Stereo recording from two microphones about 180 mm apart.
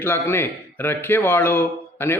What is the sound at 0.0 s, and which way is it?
A man's voice, 10° left (ahead or behind).